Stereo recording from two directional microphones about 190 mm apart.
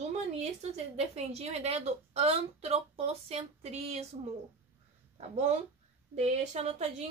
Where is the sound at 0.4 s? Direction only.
35° right (ahead or behind).